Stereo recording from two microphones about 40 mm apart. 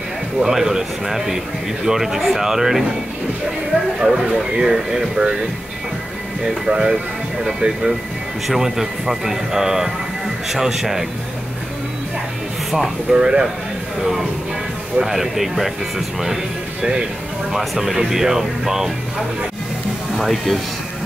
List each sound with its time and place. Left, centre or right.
0.4 s speech: centre
4.0 s speech: centre
6.4 s speech: centre
7.6 s speech: right
8.5 s speech: centre
12.7 s speech: centre
13.2 s speech: right
15.0 s speech: centre
17.5 s speech: centre
20.2 s speech: centre